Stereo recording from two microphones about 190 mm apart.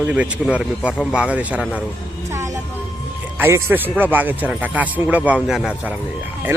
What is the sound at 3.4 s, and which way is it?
Speech, 10° right (ahead or behind).